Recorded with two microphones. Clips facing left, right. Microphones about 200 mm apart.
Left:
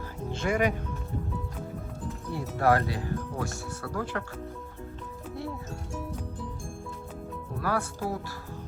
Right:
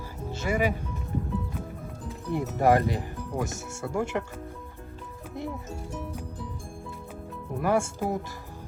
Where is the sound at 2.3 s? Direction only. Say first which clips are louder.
Right 3 dB; 20° right (ahead or behind).